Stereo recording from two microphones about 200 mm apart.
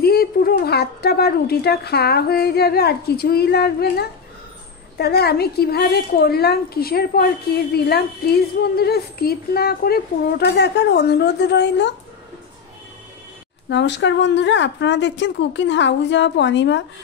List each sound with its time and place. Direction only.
0.0 s a woman's voice: 50° left (ahead or behind)
13.7 s a woman's voice: 65° left (ahead or behind)